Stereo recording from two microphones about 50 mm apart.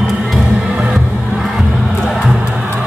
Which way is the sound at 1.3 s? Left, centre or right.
Centre.